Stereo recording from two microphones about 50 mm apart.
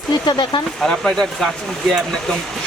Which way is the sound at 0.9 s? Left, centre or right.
Centre.